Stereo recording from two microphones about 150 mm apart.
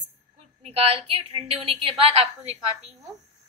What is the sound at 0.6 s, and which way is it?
A woman's voice, 45° right (ahead or behind).